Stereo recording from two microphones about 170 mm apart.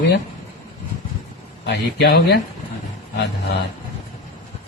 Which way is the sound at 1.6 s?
80° left.